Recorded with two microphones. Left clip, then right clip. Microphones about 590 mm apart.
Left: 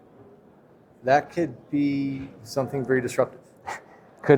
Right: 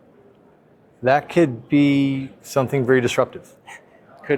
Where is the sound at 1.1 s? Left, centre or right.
Right.